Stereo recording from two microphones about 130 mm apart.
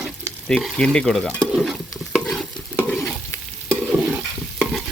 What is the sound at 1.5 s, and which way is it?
Stir, 5° right (ahead or behind).